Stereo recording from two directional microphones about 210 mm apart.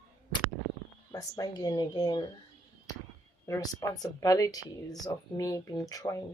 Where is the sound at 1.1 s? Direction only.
15° left (ahead or behind).